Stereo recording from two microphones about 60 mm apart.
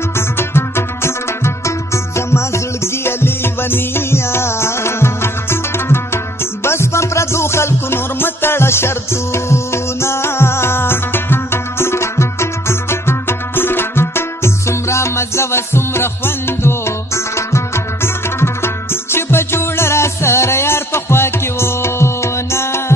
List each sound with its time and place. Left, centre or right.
0.4 s music: left